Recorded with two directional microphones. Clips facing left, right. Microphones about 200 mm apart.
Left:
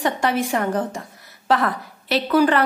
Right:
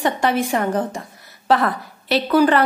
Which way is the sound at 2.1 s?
35° right (ahead or behind).